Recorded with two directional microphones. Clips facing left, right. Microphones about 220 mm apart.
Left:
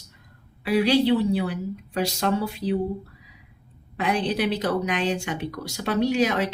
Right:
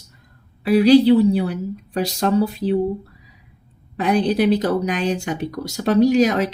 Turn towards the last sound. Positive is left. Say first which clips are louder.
# right 7 dB
turn(degrees=-40)  # may be behind; listen again after turning